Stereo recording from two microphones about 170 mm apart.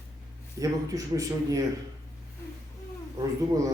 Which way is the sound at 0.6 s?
20° right (ahead or behind).